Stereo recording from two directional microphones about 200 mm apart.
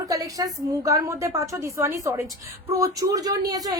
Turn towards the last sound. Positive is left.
turn(degrees=-20)  # may be behind; listen again after turning